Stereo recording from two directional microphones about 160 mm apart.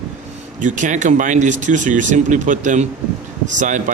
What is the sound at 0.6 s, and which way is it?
Speech, 50° right (ahead or behind).